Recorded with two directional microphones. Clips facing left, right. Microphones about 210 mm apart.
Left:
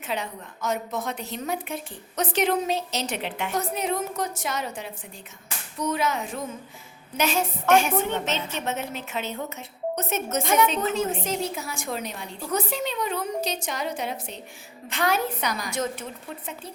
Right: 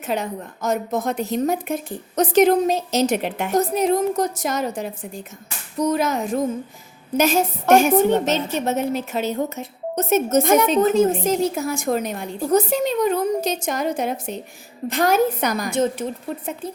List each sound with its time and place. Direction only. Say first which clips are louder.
0.0 s a woman's voice: right 6 dB; 45° right (ahead or behind)